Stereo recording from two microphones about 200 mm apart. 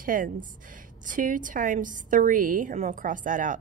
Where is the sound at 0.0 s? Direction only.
45° right (ahead or behind).